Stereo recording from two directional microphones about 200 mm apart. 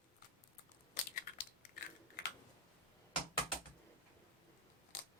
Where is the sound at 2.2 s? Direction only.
50° left (ahead or behind).